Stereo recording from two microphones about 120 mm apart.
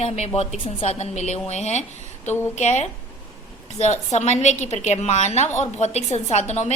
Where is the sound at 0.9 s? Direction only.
65° left (ahead or behind).